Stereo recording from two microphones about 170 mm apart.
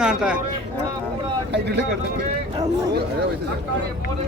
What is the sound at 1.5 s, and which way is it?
Speech, 85° right.